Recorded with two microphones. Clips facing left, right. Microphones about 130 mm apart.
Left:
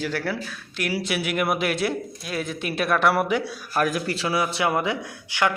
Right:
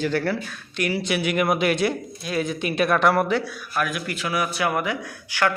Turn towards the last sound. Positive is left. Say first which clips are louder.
# right 1 dB
turn(degrees=25)  # may be behind; listen again after turning